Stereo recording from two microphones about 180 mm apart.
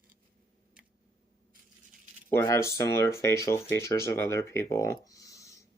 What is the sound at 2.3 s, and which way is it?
Speech, 15° left (ahead or behind).